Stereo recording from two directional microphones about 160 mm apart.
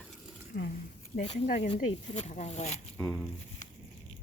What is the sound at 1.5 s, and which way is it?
Speech, 45° left (ahead or behind).